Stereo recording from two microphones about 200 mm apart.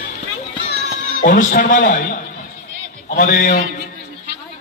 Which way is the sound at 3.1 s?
45° left (ahead or behind).